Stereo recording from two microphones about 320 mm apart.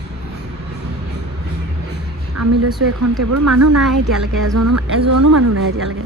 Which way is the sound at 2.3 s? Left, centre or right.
Right.